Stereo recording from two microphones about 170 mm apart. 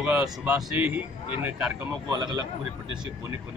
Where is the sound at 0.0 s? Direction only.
5° right (ahead or behind).